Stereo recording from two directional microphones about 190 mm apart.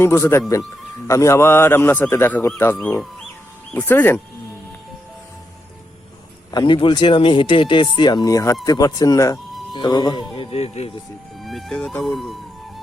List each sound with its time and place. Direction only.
0.0 s a man's voice: 15° left (ahead or behind)
2.7 s fowl: 5° left (ahead or behind)
3.8 s a man's voice: 10° left (ahead or behind)
6.5 s speech: 25° left (ahead or behind)
11.3 s speech: centre (ahead or behind)